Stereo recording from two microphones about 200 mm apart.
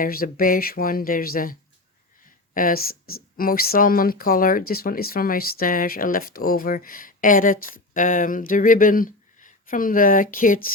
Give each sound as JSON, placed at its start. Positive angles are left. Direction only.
{"t": 0.0, "sound": "speech", "side_deg": 45}
{"t": 2.6, "sound": "speech", "side_deg": 45}